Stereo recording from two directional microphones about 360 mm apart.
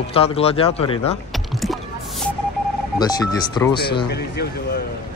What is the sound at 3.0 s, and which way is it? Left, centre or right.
Speech, centre.